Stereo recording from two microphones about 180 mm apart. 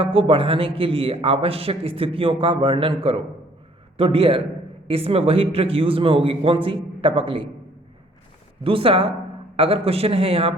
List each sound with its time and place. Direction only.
0.0 s a man's voice: 30° right (ahead or behind)
8.6 s a man's voice: 30° right (ahead or behind)